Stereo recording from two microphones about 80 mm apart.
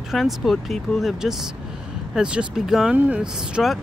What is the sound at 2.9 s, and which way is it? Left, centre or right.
Speech, centre.